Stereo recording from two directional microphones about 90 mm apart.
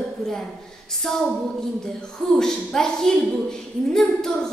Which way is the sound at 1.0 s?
5° left (ahead or behind).